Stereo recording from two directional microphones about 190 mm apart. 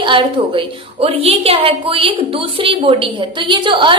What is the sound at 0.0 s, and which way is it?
A woman's voice, 25° right (ahead or behind).